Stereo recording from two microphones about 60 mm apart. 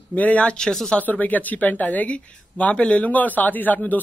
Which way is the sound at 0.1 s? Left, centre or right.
Left.